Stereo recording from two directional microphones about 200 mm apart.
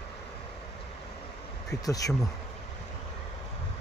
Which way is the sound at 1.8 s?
15° left (ahead or behind).